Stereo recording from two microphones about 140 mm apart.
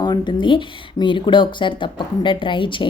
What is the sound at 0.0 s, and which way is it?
Speech, 30° left (ahead or behind).